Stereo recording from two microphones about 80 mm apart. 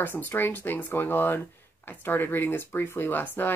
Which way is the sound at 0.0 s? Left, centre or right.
Left.